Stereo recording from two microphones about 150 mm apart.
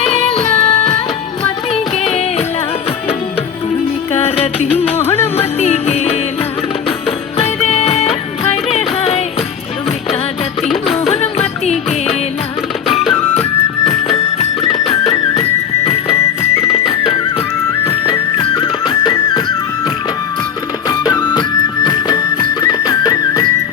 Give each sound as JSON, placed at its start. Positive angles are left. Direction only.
{"t": 0.0, "sound": "music", "side_deg": 45}
{"t": 2.0, "sound": "music", "side_deg": 45}
{"t": 4.1, "sound": "music", "side_deg": 45}
{"t": 4.9, "sound": "music", "side_deg": 15}
{"t": 5.4, "sound": "music", "side_deg": 45}
{"t": 7.3, "sound": "music", "side_deg": 45}
{"t": 10.8, "sound": "music", "side_deg": 45}
{"t": 13.3, "sound": "music", "side_deg": 45}
{"t": 20.8, "sound": "music", "side_deg": 30}